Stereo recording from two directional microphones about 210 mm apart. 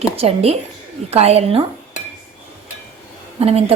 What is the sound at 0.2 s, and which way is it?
A woman's voice, 30° right (ahead or behind).